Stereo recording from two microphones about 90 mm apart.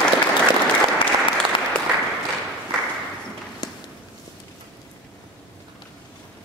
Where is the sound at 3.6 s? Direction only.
50° left (ahead or behind).